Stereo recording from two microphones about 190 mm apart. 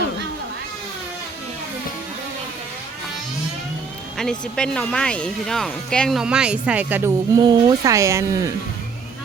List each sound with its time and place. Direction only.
4.2 s speech: 5° left (ahead or behind)
7.3 s speech: 25° right (ahead or behind)